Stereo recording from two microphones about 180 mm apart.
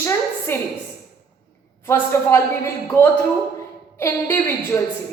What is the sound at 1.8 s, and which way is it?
Speech, 15° left (ahead or behind).